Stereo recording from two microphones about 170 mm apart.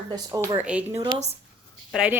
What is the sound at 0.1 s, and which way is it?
Speech, 20° right (ahead or behind).